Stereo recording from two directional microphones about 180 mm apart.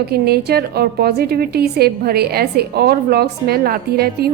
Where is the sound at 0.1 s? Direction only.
60° right (ahead or behind).